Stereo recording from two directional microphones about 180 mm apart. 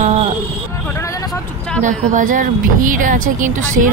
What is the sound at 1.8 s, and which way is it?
Speech, 45° right (ahead or behind).